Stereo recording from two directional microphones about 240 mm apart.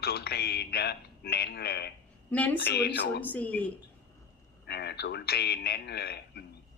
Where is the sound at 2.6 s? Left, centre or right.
Left.